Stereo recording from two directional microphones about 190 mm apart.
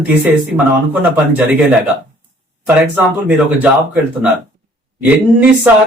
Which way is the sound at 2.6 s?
10° right (ahead or behind).